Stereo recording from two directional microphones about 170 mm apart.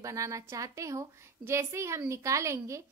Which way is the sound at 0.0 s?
20° right (ahead or behind).